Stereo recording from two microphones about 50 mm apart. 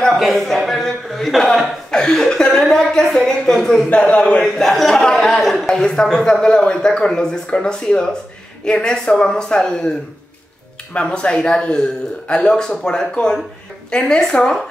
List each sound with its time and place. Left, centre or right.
0.1 s speech: centre
3.9 s speech: left
4.4 s speech: centre
5.0 s a sound: centre
6.4 s speech: centre